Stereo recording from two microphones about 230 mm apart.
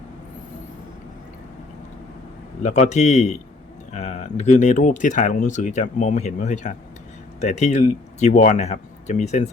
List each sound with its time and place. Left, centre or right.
2.6 s speech: left